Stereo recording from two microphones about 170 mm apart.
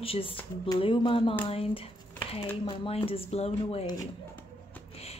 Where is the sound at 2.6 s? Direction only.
35° left (ahead or behind).